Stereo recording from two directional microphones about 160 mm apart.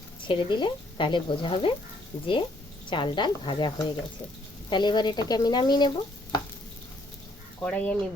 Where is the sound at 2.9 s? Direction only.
30° left (ahead or behind).